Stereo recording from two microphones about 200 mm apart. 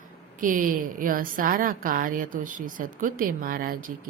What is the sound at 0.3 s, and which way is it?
A woman's voice, 40° right (ahead or behind).